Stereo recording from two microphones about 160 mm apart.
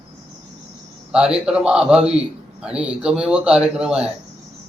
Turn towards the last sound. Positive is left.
turn(degrees=-5)  # may be behind; listen again after turning